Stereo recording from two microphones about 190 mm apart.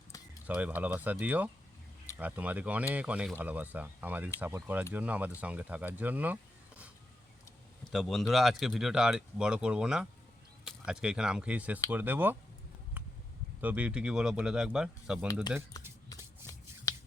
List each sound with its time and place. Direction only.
0.4 s speech: 5° right (ahead or behind)
7.9 s speech: centre (ahead or behind)
13.6 s speech: 5° right (ahead or behind)
15.7 s shuffling cards: 20° left (ahead or behind)
16.4 s a sound: 15° right (ahead or behind)
16.9 s finger snapping: 20° left (ahead or behind)